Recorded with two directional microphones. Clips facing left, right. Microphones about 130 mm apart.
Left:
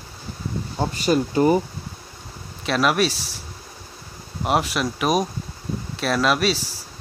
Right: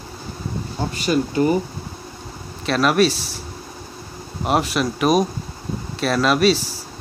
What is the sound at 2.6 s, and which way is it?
Speech, 5° left (ahead or behind).